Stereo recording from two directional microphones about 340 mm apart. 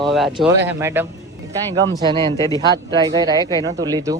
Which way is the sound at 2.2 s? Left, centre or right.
Centre.